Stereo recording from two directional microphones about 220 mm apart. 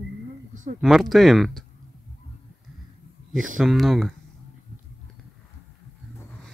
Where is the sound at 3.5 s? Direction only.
Centre (ahead or behind).